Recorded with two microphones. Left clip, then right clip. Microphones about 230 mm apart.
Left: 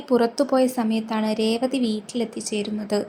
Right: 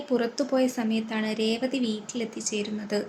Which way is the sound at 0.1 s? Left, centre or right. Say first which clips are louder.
Left 6 dB; centre.